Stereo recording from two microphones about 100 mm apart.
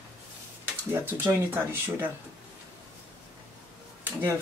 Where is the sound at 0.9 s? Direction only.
20° right (ahead or behind).